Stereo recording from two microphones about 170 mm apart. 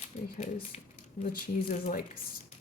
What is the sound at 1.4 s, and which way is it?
Speech, 55° left (ahead or behind).